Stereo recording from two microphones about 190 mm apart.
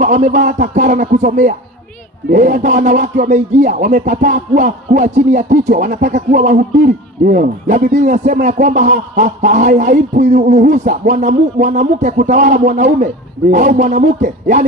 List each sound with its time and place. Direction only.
0.0 s speech: 40° right (ahead or behind)